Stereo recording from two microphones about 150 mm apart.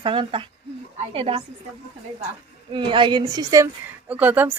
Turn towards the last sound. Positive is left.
turn(degrees=-10)  # may be behind; listen again after turning